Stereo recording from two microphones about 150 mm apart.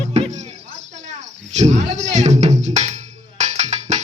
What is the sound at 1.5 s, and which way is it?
Speech, 50° right (ahead or behind).